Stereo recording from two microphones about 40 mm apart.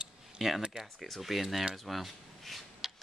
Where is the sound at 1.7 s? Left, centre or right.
Centre.